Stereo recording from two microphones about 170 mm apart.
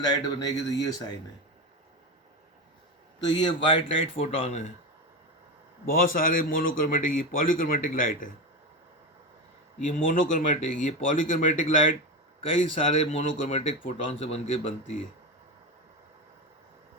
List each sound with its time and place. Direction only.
0.0 s speech: 20° left (ahead or behind)
3.2 s a man's voice: 25° left (ahead or behind)
5.8 s speech: 55° left (ahead or behind)
9.7 s speech: 50° left (ahead or behind)
12.9 s a man's voice: 40° left (ahead or behind)